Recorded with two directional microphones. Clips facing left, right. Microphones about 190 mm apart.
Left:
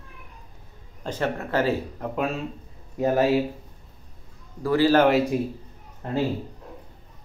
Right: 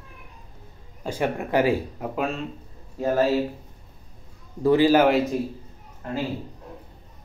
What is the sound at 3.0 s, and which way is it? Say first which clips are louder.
Speech: left 1 dB; 15° left (ahead or behind).